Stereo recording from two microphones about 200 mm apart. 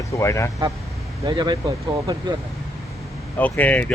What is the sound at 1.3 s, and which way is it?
Speech, 20° right (ahead or behind).